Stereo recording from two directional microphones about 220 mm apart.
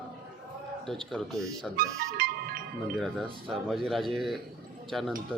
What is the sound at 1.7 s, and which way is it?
Speech, 40° right (ahead or behind).